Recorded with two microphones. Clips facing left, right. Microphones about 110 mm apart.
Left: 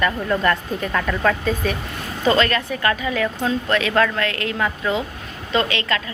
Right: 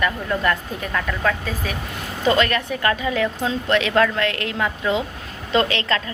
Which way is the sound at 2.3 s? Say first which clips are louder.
Left 1 dB; 10° right (ahead or behind).